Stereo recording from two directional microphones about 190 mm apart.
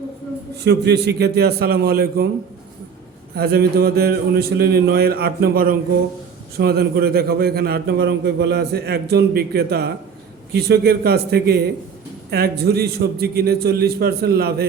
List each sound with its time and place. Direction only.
0.6 s a man's voice: 60° right (ahead or behind)
3.3 s a man's voice: 55° right (ahead or behind)